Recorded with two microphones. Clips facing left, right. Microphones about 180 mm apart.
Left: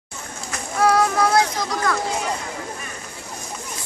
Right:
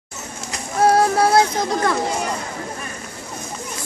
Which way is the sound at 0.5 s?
30° right (ahead or behind).